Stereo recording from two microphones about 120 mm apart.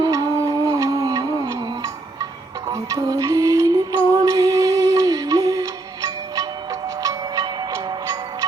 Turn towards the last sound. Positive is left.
turn(degrees=-30)  # may be behind; listen again after turning